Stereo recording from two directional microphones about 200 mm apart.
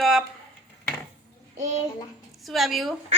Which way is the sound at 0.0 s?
Centre (ahead or behind).